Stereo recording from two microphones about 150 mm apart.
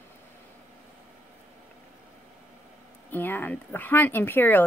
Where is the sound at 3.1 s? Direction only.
15° left (ahead or behind).